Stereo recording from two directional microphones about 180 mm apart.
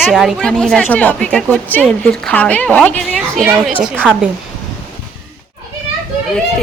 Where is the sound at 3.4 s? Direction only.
5° right (ahead or behind).